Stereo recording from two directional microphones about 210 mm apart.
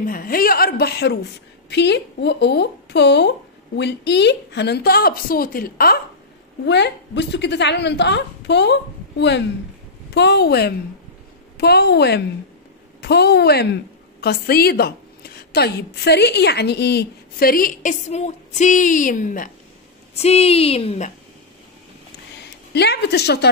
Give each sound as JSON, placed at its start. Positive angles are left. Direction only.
{"t": 0.0, "sound": "a woman's voice", "side_deg": 40}
{"t": 22.7, "sound": "a woman's voice", "side_deg": 50}